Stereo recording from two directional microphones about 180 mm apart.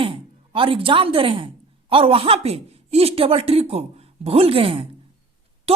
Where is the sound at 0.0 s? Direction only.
30° right (ahead or behind).